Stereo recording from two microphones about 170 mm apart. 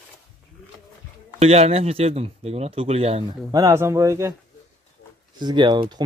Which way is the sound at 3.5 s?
15° right (ahead or behind).